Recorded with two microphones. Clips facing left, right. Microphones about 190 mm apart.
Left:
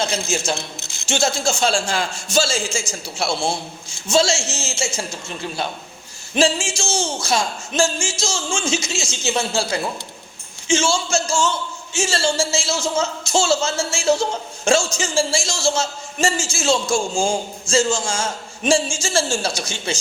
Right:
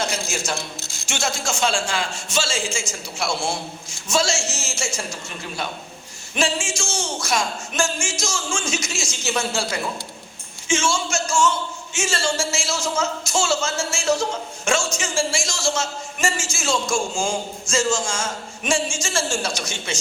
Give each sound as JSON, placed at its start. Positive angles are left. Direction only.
{"t": 0.4, "sound": "a man's voice", "side_deg": 25}
{"t": 6.3, "sound": "a man's voice", "side_deg": 30}
{"t": 10.7, "sound": "a man's voice", "side_deg": 35}